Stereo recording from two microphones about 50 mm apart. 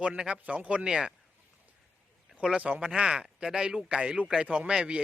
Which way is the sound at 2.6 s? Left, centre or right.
Right.